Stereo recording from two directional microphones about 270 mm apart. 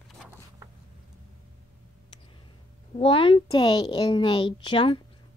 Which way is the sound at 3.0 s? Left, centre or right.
Centre.